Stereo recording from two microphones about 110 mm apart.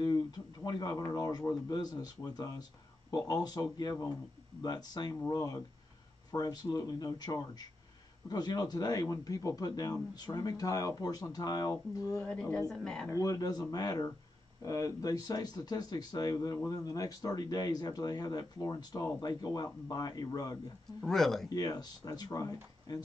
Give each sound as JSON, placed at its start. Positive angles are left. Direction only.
{"t": 0.7, "sound": "speech", "side_deg": 35}
{"t": 12.2, "sound": "speech", "side_deg": 10}
{"t": 13.1, "sound": "speech", "side_deg": 30}
{"t": 21.0, "sound": "speech", "side_deg": 5}
{"t": 21.5, "sound": "speech", "side_deg": 35}